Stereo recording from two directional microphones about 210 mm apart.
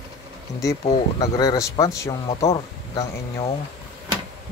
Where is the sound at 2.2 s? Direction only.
25° left (ahead or behind).